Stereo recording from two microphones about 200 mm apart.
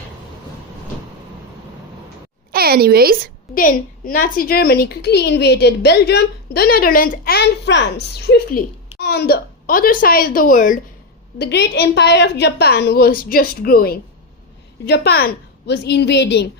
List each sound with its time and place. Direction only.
2.5 s a sound: 50° right (ahead or behind)
3.5 s a woman's voice: 45° left (ahead or behind)
11.3 s a woman's voice: 55° left (ahead or behind)